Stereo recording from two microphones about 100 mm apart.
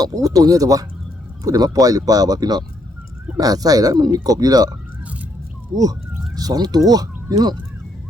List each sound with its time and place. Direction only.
0.0 s speech: 35° right (ahead or behind)
5.8 s speech: 40° right (ahead or behind)